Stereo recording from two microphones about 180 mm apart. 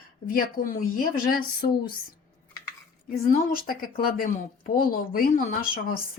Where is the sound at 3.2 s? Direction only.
55° left (ahead or behind).